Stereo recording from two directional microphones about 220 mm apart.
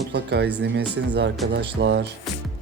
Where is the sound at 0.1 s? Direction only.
50° right (ahead or behind).